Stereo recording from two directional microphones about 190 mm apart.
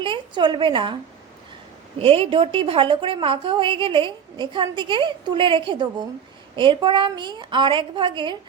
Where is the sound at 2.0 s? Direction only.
30° right (ahead or behind).